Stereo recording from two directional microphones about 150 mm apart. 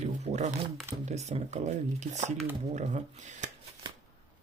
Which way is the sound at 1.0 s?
50° right (ahead or behind).